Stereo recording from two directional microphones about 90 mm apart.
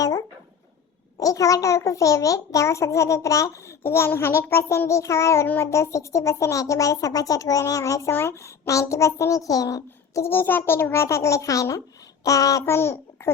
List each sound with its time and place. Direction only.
0.0 s a sound: 40° left (ahead or behind)
1.2 s a child's voice: 40° left (ahead or behind)
8.1 s a child's voice: 25° left (ahead or behind)
10.2 s a child's voice: 25° left (ahead or behind)